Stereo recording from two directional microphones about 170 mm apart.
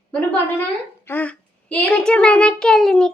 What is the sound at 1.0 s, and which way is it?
A child's voice, 10° left (ahead or behind).